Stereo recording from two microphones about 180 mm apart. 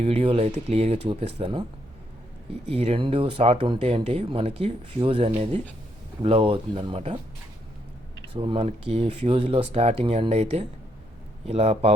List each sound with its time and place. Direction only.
0.0 s speech: 35° right (ahead or behind)
2.6 s speech: 35° right (ahead or behind)
8.4 s speech: 30° right (ahead or behind)